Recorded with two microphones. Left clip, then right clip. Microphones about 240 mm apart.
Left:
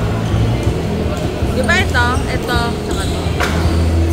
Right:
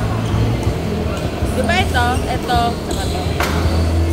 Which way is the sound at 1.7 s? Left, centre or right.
Centre.